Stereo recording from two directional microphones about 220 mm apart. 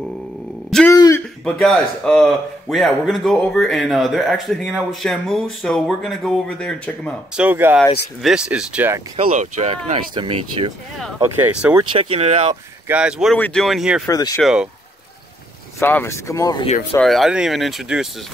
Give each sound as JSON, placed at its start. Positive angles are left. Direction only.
{"t": 0.7, "sound": "grunt", "side_deg": 5}
{"t": 0.9, "sound": "a sound", "side_deg": 15}
{"t": 1.4, "sound": "a man's voice", "side_deg": 0}
{"t": 9.1, "sound": "speech", "side_deg": -30}
{"t": 11.1, "sound": "speech", "side_deg": -10}
{"t": 11.9, "sound": "speech", "side_deg": -25}
{"t": 12.8, "sound": "a man's voice", "side_deg": -5}
{"t": 14.0, "sound": "speech", "side_deg": 15}
{"t": 14.4, "sound": "a man's voice", "side_deg": -5}
{"t": 15.8, "sound": "speech", "side_deg": 10}
{"t": 16.9, "sound": "a man's voice", "side_deg": 0}